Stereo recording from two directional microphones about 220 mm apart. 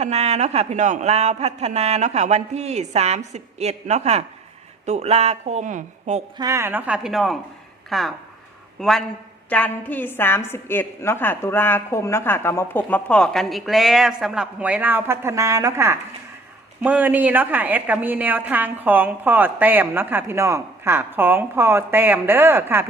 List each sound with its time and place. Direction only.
0.0 s speech: 30° right (ahead or behind)
6.3 s a woman's voice: 15° right (ahead or behind)